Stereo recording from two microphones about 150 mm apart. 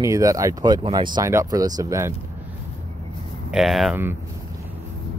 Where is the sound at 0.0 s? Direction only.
20° right (ahead or behind).